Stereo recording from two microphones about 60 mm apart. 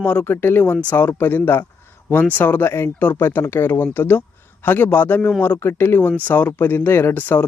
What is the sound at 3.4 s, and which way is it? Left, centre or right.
A man's voice, left.